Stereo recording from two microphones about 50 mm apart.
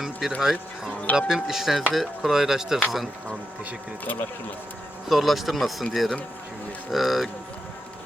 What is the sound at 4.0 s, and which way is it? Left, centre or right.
Speech, left.